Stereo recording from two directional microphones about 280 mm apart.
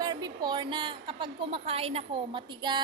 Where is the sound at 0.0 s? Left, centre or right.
Centre.